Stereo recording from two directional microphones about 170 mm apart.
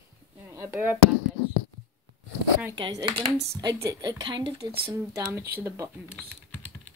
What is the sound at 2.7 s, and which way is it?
A woman's voice, 30° right (ahead or behind).